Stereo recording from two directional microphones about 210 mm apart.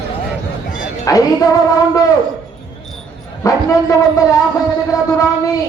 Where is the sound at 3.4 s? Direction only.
15° left (ahead or behind).